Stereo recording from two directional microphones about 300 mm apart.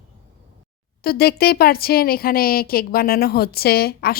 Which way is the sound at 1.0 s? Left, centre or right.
Left.